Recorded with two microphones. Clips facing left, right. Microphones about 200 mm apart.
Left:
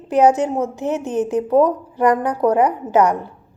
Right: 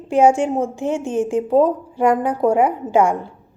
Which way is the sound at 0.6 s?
20° left (ahead or behind).